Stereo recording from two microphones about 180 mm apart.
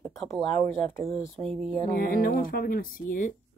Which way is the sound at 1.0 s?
30° right (ahead or behind).